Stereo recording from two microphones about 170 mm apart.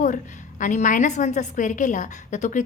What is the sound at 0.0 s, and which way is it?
A woman's voice, 45° left (ahead or behind).